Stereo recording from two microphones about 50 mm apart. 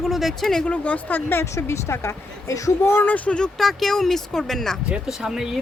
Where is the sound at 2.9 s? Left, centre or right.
Left.